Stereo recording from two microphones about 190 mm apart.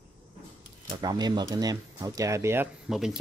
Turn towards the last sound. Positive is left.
turn(degrees=-5)  # may be behind; listen again after turning